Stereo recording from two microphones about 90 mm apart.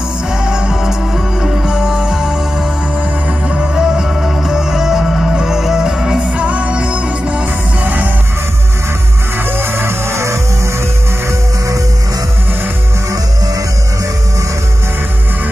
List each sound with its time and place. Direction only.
0.5 s music: 10° right (ahead or behind)
9.5 s music: 25° right (ahead or behind)